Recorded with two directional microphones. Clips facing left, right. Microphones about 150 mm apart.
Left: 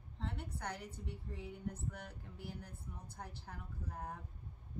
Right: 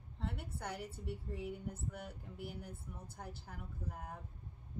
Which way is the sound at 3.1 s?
5° right (ahead or behind).